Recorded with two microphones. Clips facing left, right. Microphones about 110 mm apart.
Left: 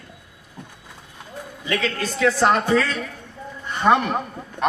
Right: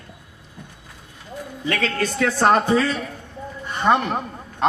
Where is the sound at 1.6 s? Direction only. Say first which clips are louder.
Right 1 dB; 40° right (ahead or behind).